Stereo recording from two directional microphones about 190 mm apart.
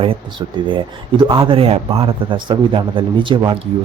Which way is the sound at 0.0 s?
30° right (ahead or behind).